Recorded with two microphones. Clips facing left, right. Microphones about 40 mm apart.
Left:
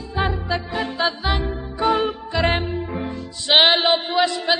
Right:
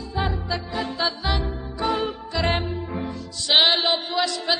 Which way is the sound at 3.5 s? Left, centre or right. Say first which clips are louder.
Left 4 dB; left.